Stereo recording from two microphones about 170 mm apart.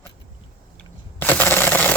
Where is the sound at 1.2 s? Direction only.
10° left (ahead or behind).